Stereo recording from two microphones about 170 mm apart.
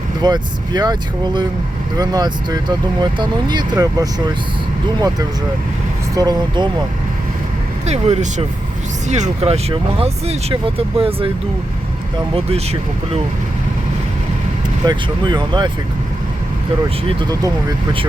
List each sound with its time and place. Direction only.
0.2 s speech: 25° right (ahead or behind)
6.1 s speech: 25° right (ahead or behind)
7.9 s speech: 40° right (ahead or behind)
12.3 s speech: 35° right (ahead or behind)
14.8 s speech: 25° right (ahead or behind)
17.2 s speech: 25° right (ahead or behind)